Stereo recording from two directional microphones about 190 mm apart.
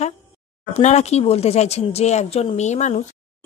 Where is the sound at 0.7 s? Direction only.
35° left (ahead or behind).